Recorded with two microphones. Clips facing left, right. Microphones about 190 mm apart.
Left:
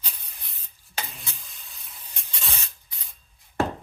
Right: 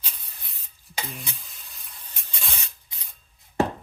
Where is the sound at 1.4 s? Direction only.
Centre (ahead or behind).